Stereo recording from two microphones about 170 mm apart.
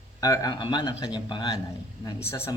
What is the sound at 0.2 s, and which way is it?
Speech, 20° left (ahead or behind).